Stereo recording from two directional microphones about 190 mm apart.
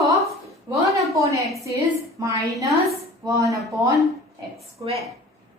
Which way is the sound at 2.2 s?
15° right (ahead or behind).